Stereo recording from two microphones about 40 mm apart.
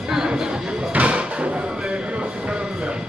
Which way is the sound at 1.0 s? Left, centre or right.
Right.